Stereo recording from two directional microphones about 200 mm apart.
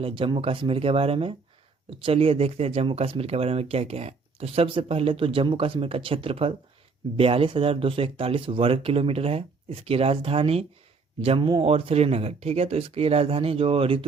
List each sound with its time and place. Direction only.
0.0 s speech: 25° right (ahead or behind)